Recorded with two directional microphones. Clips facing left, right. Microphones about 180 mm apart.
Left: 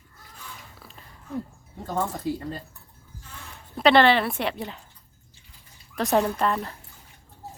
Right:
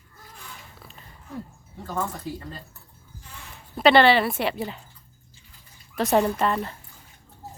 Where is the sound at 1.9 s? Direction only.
20° left (ahead or behind).